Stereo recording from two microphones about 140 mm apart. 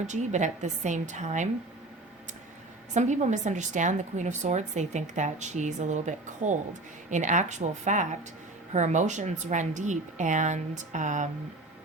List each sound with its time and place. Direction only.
0.1 s a woman's voice: 60° right (ahead or behind)
2.9 s a woman's voice: 55° right (ahead or behind)